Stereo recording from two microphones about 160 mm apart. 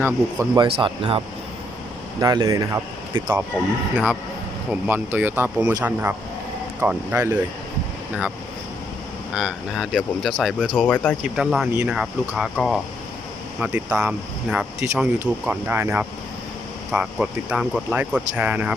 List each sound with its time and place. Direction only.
0.0 s speech: 20° right (ahead or behind)
2.2 s speech: 20° right (ahead or behind)
9.3 s speech: 5° right (ahead or behind)
11.2 s speech: 5° right (ahead or behind)